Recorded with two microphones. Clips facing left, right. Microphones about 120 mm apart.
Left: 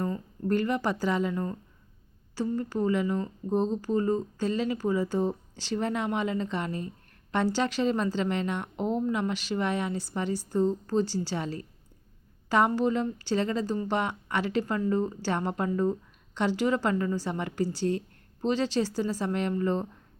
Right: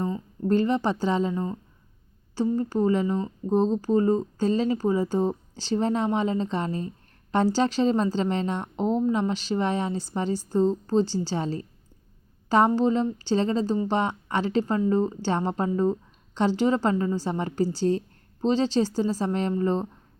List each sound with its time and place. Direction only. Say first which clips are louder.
0.0 s a woman's voice: right 3 dB; 25° right (ahead or behind)